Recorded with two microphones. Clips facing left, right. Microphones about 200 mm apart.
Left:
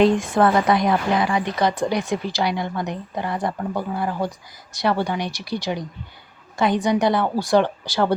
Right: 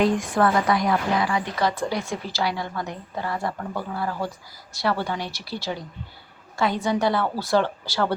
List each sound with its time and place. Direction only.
0.0 s a woman's voice: 25° left (ahead or behind)